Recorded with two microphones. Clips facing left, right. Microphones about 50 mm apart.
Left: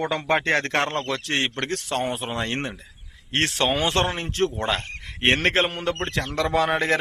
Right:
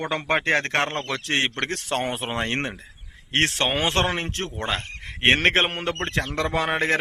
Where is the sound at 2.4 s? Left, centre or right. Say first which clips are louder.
Right 3 dB; right.